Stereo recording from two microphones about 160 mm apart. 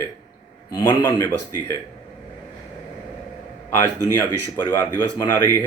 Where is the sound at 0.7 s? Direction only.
25° left (ahead or behind).